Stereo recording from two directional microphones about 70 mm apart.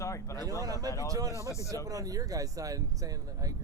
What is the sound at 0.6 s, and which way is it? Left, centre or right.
Speech, right.